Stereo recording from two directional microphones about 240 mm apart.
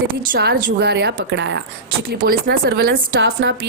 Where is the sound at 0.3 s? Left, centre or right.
Right.